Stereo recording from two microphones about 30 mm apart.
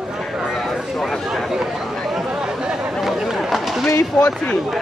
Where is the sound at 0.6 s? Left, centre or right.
Centre.